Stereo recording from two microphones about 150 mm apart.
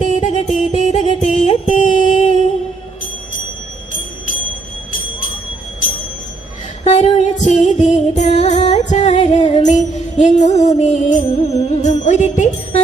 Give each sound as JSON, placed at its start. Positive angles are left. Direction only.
{"t": 0.0, "sound": "music", "side_deg": 50}
{"t": 6.8, "sound": "music", "side_deg": 50}